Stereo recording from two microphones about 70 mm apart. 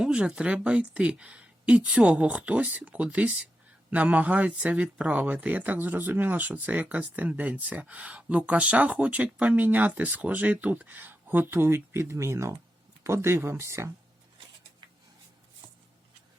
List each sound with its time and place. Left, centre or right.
0.0 s speech: centre; by 13.9 s right